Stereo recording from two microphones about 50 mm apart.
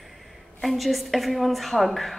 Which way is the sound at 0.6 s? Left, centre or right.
Centre.